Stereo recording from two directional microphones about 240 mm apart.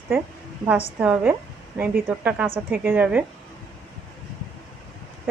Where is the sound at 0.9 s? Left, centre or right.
Centre.